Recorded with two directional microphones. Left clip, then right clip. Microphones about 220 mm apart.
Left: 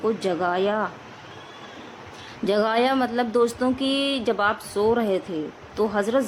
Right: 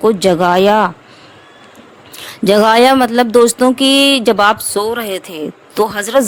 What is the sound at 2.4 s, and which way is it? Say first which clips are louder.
Speech: right 13 dB; 45° right (ahead or behind).